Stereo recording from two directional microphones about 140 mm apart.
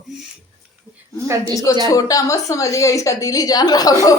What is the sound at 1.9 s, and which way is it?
A woman's voice, 25° left (ahead or behind).